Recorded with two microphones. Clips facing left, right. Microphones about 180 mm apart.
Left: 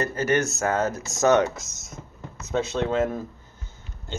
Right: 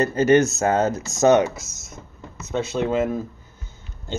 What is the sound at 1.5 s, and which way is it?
Speech, 5° right (ahead or behind).